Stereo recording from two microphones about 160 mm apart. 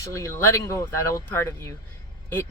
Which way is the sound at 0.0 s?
20° left (ahead or behind).